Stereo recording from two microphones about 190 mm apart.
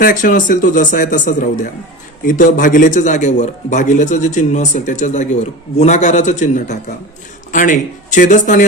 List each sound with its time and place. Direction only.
0.0 s a man's voice: 45° left (ahead or behind)